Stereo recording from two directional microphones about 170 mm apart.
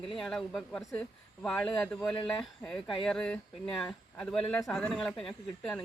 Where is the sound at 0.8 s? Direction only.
20° left (ahead or behind).